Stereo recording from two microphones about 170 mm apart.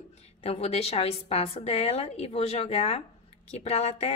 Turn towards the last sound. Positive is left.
turn(degrees=40)  # may be behind; listen again after turning